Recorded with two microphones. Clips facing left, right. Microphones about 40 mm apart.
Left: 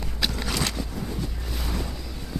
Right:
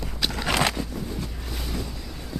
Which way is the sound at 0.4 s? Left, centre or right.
Right.